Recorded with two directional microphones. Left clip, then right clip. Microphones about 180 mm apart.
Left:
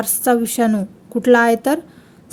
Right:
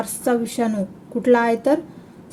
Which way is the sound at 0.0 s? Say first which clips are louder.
Left 4 dB; 45° left (ahead or behind).